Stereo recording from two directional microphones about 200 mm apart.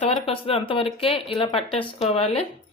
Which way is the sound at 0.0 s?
30° left (ahead or behind).